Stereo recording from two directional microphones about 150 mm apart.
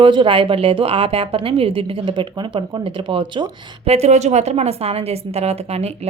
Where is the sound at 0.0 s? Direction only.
35° right (ahead or behind).